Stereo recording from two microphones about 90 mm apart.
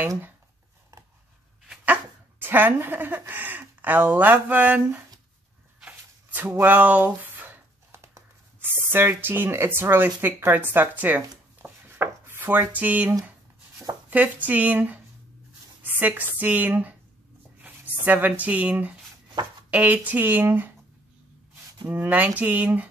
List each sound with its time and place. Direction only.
2.3 s speech: 25° right (ahead or behind)
11.6 s dishes: 25° right (ahead or behind)
14.1 s speech: 20° right (ahead or behind)
17.6 s a sound: 15° right (ahead or behind)
18.4 s speech: 15° right (ahead or behind)
21.8 s speech: 20° right (ahead or behind)